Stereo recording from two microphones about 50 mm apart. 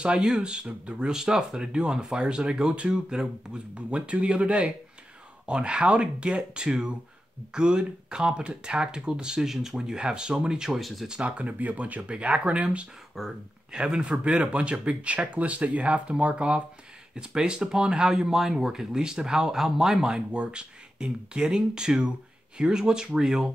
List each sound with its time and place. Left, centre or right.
0.0 s speech: centre
1.0 s speech: centre
10.8 s speech: centre
11.1 s speech: right
13.2 s speech: centre
13.7 s speech: centre